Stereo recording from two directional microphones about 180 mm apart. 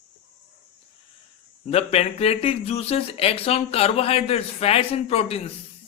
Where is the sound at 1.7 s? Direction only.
35° left (ahead or behind).